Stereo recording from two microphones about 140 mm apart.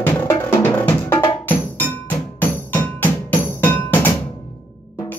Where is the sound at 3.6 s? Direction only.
15° left (ahead or behind).